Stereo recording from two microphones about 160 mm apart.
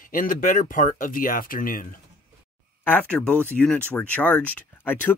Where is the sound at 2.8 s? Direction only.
10° left (ahead or behind).